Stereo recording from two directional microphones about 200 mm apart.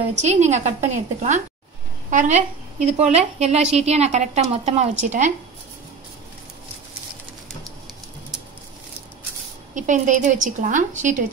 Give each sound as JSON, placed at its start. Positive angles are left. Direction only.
{"t": 0.1, "sound": "a woman's voice", "side_deg": -35}
{"t": 9.8, "sound": "a woman's voice", "side_deg": -40}